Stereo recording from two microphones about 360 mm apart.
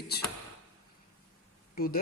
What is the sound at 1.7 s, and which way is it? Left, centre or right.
Speech, left.